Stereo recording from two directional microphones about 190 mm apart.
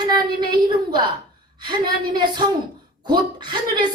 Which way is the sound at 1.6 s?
25° right (ahead or behind).